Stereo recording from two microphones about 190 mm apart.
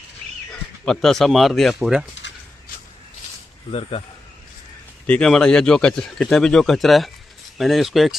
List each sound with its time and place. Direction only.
0.9 s speech: centre (ahead or behind)
3.7 s speech: 30° left (ahead or behind)
5.0 s speech: 5° left (ahead or behind)